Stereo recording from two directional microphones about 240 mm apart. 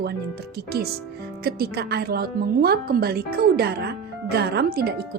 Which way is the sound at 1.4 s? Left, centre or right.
Right.